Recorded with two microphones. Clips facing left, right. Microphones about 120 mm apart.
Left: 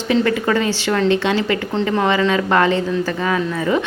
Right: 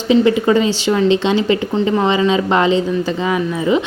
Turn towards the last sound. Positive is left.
turn(degrees=-15)  # may be behind; listen again after turning